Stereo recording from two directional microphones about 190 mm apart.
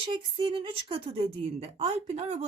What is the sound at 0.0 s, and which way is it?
Speech, 25° right (ahead or behind).